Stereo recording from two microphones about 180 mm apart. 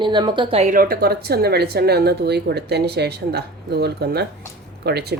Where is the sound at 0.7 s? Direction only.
55° right (ahead or behind).